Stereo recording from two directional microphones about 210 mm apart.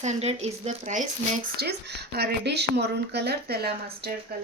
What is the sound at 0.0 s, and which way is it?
Speech, 30° right (ahead or behind).